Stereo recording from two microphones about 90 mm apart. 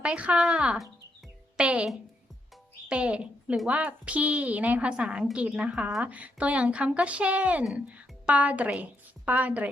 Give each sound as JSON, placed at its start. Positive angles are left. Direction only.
{"t": 0.0, "sound": "a woman's voice", "side_deg": -15}
{"t": 2.9, "sound": "a woman's voice", "side_deg": -15}